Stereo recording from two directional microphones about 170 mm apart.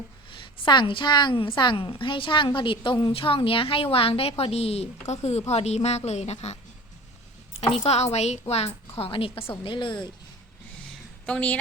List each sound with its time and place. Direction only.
0.3 s a woman's voice: 30° left (ahead or behind)
7.9 s a woman's voice: 40° left (ahead or behind)
11.3 s a woman's voice: 5° left (ahead or behind)